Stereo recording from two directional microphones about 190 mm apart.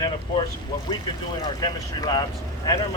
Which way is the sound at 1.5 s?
20° left (ahead or behind).